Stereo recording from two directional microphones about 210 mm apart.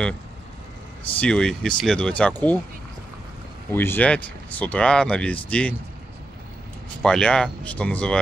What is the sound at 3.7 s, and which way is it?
Speech, 10° left (ahead or behind).